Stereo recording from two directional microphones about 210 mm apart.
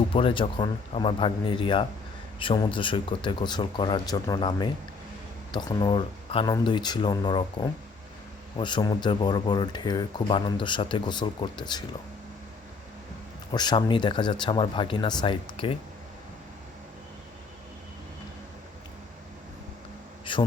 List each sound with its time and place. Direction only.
0.1 s speech: 25° left (ahead or behind)
13.5 s speech: 20° left (ahead or behind)
20.3 s a sound: 25° left (ahead or behind)